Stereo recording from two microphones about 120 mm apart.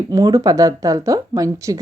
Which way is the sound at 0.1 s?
30° right (ahead or behind).